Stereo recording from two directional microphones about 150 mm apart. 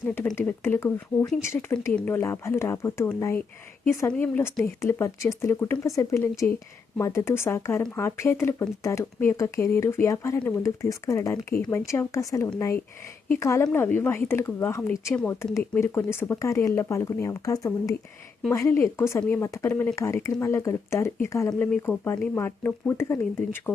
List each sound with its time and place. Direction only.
0.3 s speech: 15° left (ahead or behind)